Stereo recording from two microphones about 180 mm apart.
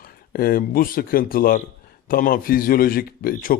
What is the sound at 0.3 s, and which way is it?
A man's voice, 55° left (ahead or behind).